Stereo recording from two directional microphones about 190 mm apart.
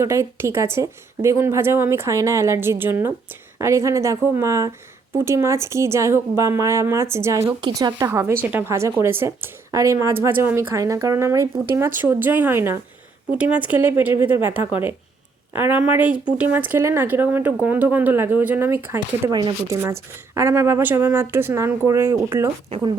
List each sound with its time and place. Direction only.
0.0 s speech: 15° right (ahead or behind)